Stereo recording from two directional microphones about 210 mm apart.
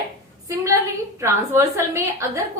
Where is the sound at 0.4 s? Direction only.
15° right (ahead or behind).